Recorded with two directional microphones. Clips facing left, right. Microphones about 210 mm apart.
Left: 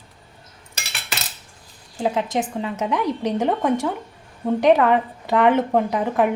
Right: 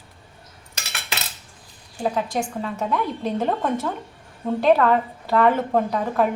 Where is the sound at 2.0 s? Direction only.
20° left (ahead or behind).